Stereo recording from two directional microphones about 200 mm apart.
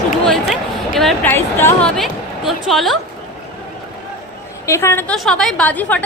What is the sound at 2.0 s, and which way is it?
A woman's voice, centre (ahead or behind).